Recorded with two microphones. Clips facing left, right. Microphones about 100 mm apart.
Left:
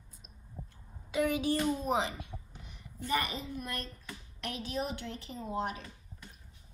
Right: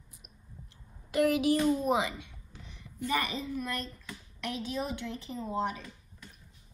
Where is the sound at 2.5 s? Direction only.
15° left (ahead or behind).